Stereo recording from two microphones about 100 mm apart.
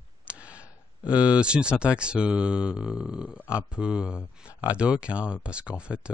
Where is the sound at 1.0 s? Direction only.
10° right (ahead or behind).